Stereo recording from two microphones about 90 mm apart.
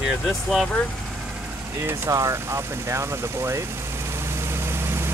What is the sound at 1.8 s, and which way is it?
Speech, 35° right (ahead or behind).